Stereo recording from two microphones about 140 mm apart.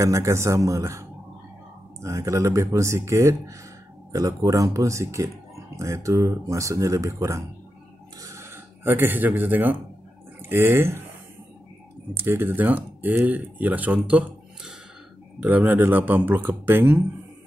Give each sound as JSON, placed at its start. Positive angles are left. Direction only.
{"t": 0.0, "sound": "speech", "side_deg": -20}
{"t": 8.2, "sound": "a sound", "side_deg": -20}
{"t": 10.5, "sound": "speech", "side_deg": -15}
{"t": 12.2, "sound": "speech", "side_deg": -15}